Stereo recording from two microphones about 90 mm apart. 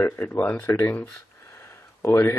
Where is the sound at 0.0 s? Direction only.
25° left (ahead or behind).